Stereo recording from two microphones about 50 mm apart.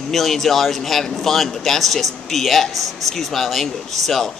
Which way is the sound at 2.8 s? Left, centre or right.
Right.